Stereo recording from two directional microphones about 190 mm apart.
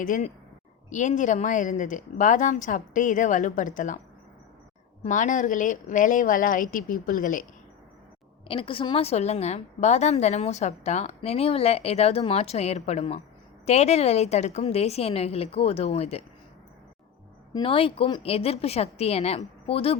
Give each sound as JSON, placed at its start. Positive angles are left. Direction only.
{"t": 0.0, "sound": "a woman's voice", "side_deg": 45}
{"t": 5.0, "sound": "speech", "side_deg": 40}
{"t": 8.4, "sound": "a woman's voice", "side_deg": 30}
{"t": 17.5, "sound": "a woman's voice", "side_deg": 30}